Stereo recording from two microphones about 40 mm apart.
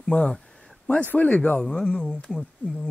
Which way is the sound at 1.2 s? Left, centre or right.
Left.